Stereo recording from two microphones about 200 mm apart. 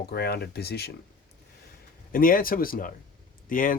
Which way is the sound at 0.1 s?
50° left (ahead or behind).